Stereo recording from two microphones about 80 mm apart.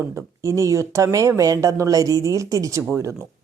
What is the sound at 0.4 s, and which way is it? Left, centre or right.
A woman's voice, right.